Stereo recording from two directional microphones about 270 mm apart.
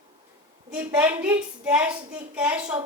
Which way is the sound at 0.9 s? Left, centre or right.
Centre.